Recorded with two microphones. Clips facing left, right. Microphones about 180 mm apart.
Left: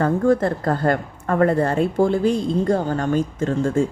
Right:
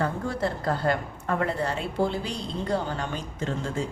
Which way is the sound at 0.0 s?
50° left (ahead or behind).